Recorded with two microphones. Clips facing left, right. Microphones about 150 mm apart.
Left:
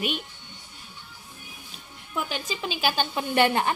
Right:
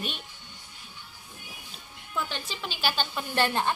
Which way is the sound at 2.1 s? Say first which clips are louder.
Left 3 dB; 15° left (ahead or behind).